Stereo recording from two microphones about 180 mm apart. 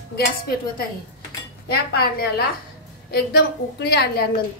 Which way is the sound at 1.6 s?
60° left (ahead or behind).